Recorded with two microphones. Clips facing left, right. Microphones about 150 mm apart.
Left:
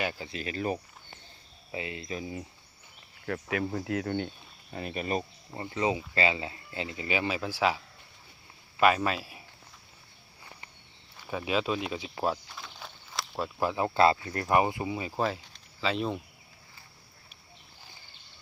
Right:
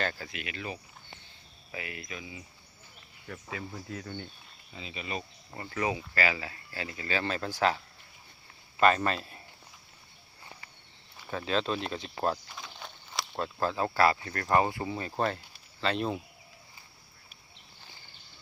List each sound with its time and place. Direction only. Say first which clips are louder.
0.0 s speech: left 1 dB; 15° left (ahead or behind)
0.3 s speech: left 7 dB; 35° left (ahead or behind)
1.7 s speech: left 5 dB; 25° left (ahead or behind)
3.2 s speech: left 9 dB; 75° left (ahead or behind)
4.7 s speech: left 7 dB; 55° left (ahead or behind)
5.5 s speech: left 3 dB; 20° left (ahead or behind); by 7.8 s 5° left (ahead or behind)
8.8 s speech: even; 5° left (ahead or behind)
11.3 s speech: left 1 dB; 10° left (ahead or behind)
13.6 s speech: left 2 dB; 15° left (ahead or behind); by 16.2 s centre (ahead or behind)